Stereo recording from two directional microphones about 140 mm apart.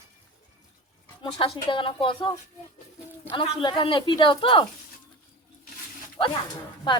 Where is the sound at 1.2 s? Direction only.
35° left (ahead or behind).